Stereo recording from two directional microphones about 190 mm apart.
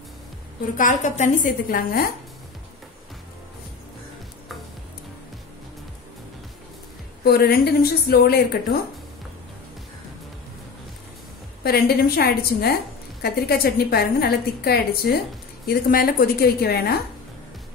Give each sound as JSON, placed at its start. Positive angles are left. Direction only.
{"t": 0.7, "sound": "a woman's voice", "side_deg": 40}
{"t": 7.2, "sound": "a woman's voice", "side_deg": 55}
{"t": 11.6, "sound": "a woman's voice", "side_deg": 55}